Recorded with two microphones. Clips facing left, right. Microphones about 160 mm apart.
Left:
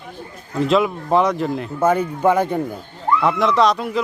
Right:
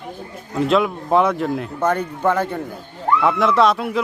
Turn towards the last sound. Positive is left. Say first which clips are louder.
# even
turn(degrees=0)  # may be behind; listen again after turning